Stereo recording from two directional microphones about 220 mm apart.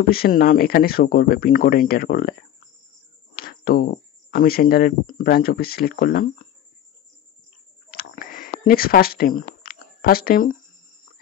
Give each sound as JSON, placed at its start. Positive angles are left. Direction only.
{"t": 0.1, "sound": "speech", "side_deg": 40}
{"t": 3.3, "sound": "speech", "side_deg": 40}
{"t": 7.9, "sound": "a sound", "side_deg": 40}